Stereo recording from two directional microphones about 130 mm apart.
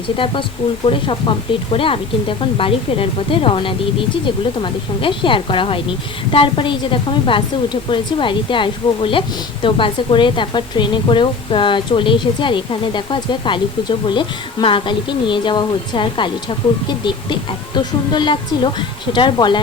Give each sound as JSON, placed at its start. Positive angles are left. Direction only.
{"t": 0.9, "sound": "a woman's voice", "side_deg": 40}